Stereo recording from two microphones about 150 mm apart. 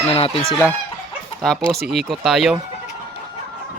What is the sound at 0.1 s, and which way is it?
Speech, 40° left (ahead or behind).